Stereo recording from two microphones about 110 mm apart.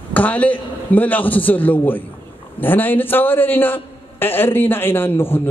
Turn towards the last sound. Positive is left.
turn(degrees=20)  # may be behind; listen again after turning